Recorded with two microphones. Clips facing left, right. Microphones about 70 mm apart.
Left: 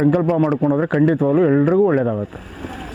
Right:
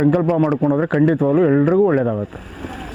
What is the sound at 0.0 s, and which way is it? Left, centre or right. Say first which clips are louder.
Speech: even; right.